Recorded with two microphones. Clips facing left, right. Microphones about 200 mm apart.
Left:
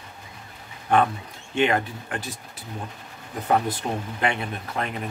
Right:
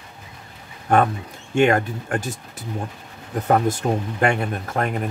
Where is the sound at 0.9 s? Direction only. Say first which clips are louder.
Right 3 dB; 50° right (ahead or behind).